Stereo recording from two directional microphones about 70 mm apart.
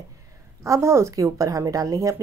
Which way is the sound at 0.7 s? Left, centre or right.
Right.